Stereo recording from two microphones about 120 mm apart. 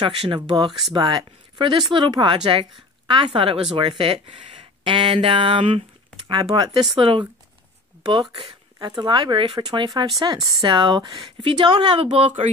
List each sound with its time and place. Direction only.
0.0 s speech: 45° right (ahead or behind)
9.0 s speech: 40° right (ahead or behind)